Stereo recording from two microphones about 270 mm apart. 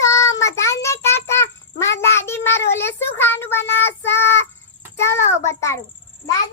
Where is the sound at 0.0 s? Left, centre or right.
Centre.